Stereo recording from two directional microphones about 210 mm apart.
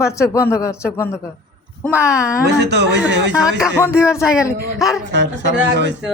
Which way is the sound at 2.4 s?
55° right (ahead or behind).